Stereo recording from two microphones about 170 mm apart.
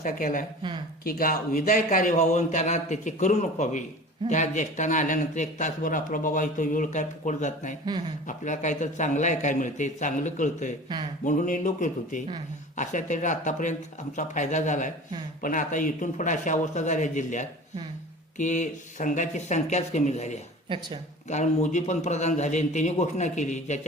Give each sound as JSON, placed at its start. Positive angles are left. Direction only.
{"t": 0.0, "sound": "speech", "side_deg": 50}